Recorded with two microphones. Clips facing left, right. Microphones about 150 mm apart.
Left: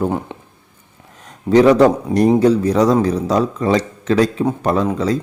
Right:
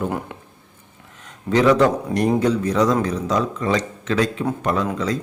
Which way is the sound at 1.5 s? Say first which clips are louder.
Left 5 dB; 35° left (ahead or behind).